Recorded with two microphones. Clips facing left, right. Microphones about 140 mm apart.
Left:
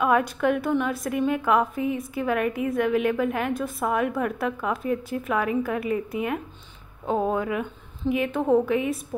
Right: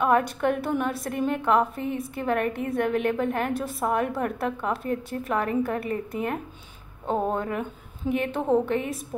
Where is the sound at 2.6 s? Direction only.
50° right (ahead or behind).